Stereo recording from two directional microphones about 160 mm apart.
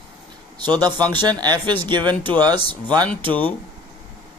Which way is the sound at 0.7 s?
25° right (ahead or behind).